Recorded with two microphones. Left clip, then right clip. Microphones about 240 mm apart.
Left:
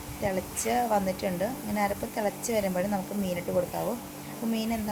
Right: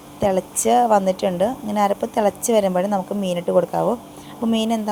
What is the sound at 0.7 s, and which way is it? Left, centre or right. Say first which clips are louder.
A woman's voice: right 11 dB; right.